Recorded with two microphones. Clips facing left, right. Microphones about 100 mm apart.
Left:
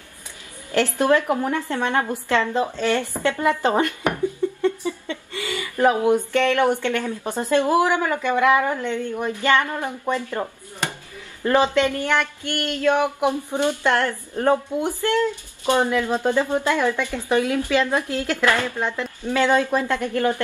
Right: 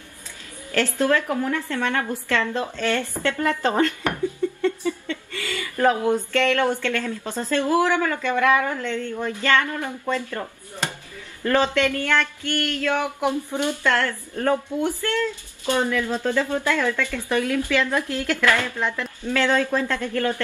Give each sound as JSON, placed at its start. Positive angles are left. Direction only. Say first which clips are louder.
{"t": 0.7, "sound": "a woman's voice", "louder": "left 2 dB", "side_deg": 20}